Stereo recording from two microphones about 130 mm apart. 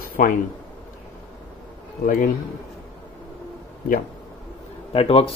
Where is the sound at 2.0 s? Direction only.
90° left.